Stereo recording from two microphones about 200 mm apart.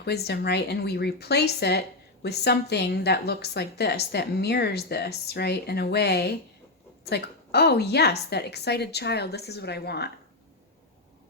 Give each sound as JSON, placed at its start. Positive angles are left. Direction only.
{"t": 0.0, "sound": "a woman's voice", "side_deg": 55}